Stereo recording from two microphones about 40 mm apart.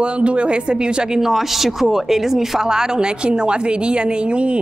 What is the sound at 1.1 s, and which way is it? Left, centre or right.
A woman's voice, centre.